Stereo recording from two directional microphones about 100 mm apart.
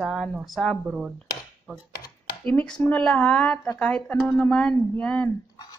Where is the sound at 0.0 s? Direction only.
5° left (ahead or behind).